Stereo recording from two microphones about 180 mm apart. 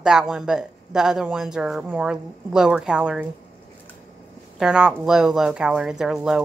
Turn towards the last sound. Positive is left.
turn(degrees=-5)  # may be behind; listen again after turning